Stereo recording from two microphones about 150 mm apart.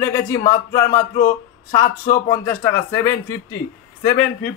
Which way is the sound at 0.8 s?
65° left (ahead or behind).